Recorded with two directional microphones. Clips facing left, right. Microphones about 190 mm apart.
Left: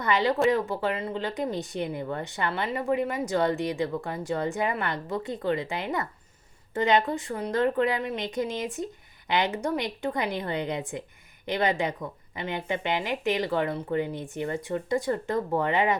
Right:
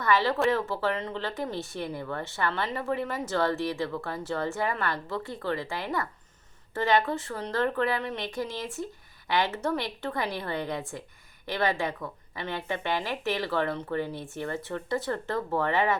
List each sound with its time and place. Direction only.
0.0 s speech: 15° left (ahead or behind)